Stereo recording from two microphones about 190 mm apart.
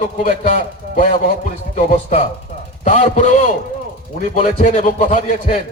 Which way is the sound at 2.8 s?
35° left (ahead or behind).